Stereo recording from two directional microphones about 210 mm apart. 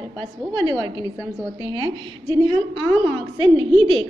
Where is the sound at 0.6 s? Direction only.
20° right (ahead or behind).